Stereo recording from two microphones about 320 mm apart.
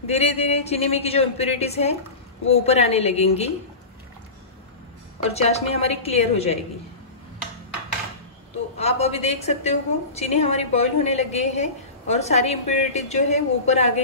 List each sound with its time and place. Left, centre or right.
0.0 s a woman's voice: centre
5.3 s a woman's voice: centre
8.7 s a woman's voice: centre